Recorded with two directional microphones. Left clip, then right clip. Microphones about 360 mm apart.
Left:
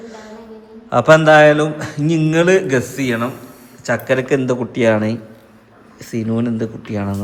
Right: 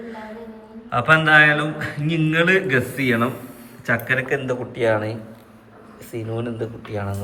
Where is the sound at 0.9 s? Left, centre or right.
Centre.